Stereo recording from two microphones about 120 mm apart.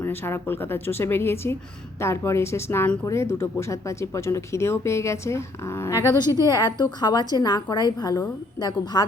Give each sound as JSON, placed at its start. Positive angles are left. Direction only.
{"t": 0.0, "sound": "speech", "side_deg": 20}
{"t": 6.4, "sound": "a woman's voice", "side_deg": 35}